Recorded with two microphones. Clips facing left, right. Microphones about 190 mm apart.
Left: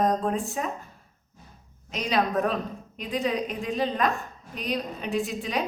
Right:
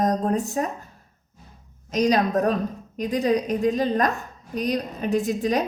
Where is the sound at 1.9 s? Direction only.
40° right (ahead or behind).